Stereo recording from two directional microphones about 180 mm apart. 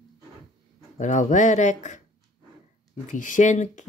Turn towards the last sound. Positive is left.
turn(degrees=45)  # may be behind; listen again after turning